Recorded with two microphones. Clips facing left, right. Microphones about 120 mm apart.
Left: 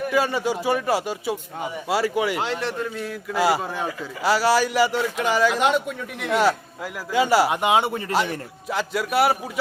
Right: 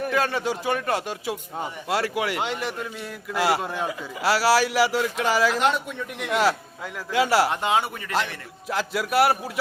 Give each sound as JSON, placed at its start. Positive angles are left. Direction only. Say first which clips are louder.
{"t": 0.1, "sound": "a man's voice", "louder": "left 4 dB", "side_deg": 5}
{"t": 7.5, "sound": "speech", "louder": "left 4 dB", "side_deg": 15}
{"t": 8.7, "sound": "a man's voice", "louder": "even", "side_deg": 0}